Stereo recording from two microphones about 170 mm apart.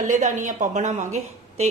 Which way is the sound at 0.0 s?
45° right (ahead or behind).